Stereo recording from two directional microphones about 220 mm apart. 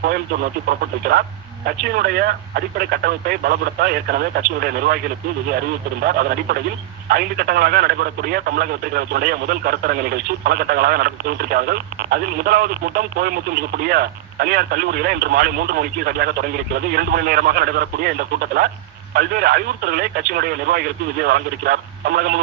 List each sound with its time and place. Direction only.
0.7 s speech: 40° right (ahead or behind)
7.1 s speech: 45° right (ahead or behind)